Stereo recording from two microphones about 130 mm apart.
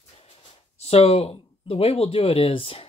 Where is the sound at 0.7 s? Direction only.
50° left (ahead or behind).